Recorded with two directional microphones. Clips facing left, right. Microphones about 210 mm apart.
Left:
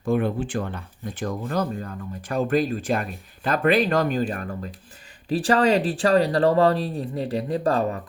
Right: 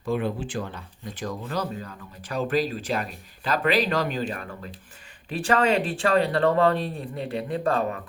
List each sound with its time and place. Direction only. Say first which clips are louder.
0.0 s speech: left 4 dB; 50° left (ahead or behind)